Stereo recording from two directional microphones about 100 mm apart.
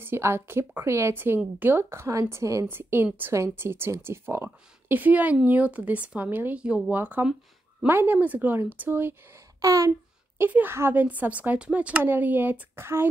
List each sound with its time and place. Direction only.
0.0 s speech: 25° right (ahead or behind)
9.6 s speech: 35° right (ahead or behind)